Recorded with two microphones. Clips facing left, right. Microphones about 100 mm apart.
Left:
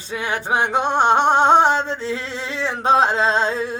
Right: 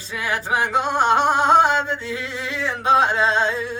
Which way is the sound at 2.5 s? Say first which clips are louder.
Left 1 dB; 30° left (ahead or behind).